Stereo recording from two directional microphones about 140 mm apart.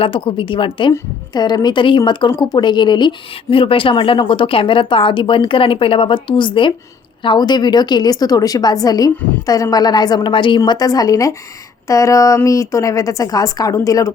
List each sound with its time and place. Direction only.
0.0 s a woman's voice: 40° left (ahead or behind); by 14.1 s 25° left (ahead or behind)